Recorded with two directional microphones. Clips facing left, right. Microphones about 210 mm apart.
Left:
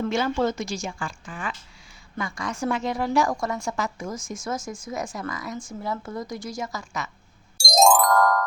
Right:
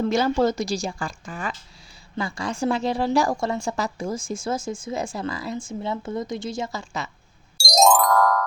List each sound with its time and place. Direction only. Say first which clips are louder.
0.0 s a woman's voice: right 3 dB; 35° right (ahead or behind)
7.6 s music: even; centre (ahead or behind)